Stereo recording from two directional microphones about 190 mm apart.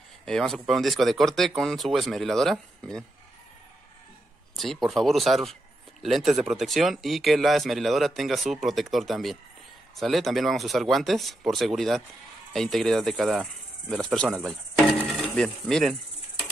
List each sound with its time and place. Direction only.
0.2 s speech: 5° left (ahead or behind)
4.6 s speech: centre (ahead or behind)
15.1 s insect: 5° left (ahead or behind)